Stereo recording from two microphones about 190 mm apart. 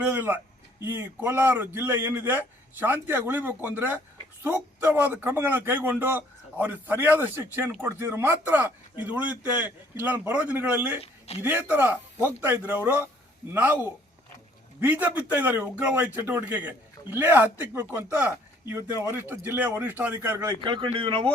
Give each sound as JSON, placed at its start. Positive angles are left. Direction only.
{"t": 0.1, "sound": "a man's voice", "side_deg": -10}
{"t": 11.0, "sound": "speech", "side_deg": 35}
{"t": 11.4, "sound": "a man's voice", "side_deg": -10}
{"t": 20.7, "sound": "speech", "side_deg": -25}